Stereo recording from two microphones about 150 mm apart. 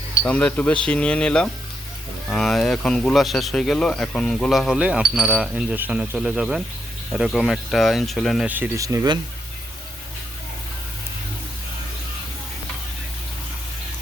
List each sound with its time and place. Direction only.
0.3 s speech: 10° left (ahead or behind)
8.4 s speech: 10° right (ahead or behind)